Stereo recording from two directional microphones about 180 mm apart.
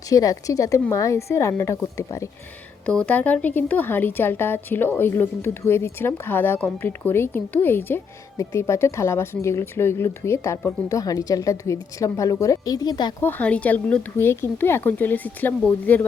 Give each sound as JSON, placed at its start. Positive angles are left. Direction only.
{"t": 0.1, "sound": "speech", "side_deg": 20}
{"t": 2.8, "sound": "speech", "side_deg": 5}
{"t": 13.2, "sound": "speech", "side_deg": 10}